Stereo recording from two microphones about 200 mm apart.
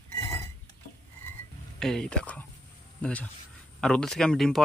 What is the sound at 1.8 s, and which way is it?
Speech, 5° left (ahead or behind).